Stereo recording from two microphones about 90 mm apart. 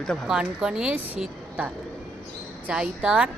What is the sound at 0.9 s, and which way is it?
Speech, 20° right (ahead or behind).